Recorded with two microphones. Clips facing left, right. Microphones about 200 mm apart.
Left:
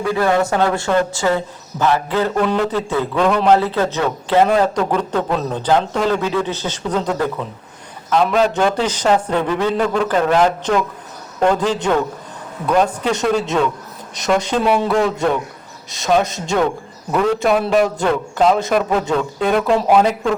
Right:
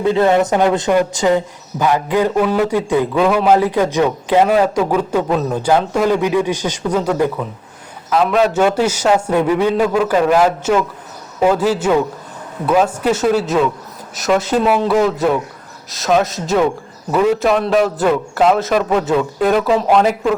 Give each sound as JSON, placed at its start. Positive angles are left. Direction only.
{"t": 0.0, "sound": "a man's voice", "side_deg": -20}